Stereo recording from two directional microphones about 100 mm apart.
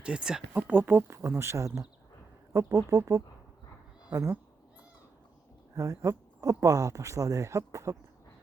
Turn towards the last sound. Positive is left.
turn(degrees=-30)  # may be behind; listen again after turning